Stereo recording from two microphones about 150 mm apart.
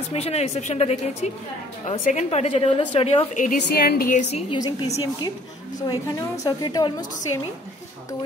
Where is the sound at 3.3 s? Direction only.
75° left (ahead or behind).